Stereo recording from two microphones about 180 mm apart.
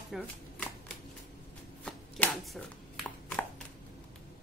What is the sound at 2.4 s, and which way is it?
Chopping, centre (ahead or behind).